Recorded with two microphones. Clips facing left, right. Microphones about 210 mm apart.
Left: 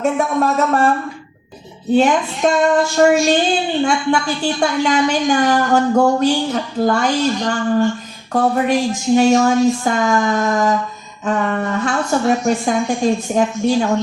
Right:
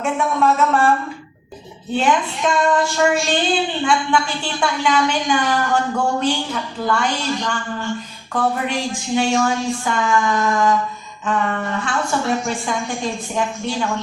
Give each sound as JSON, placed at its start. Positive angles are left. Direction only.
{"t": 0.0, "sound": "a woman's voice", "side_deg": 40}
{"t": 1.9, "sound": "a woman's voice", "side_deg": 40}